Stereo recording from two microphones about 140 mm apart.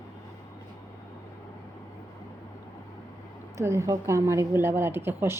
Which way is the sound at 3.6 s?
20° right (ahead or behind).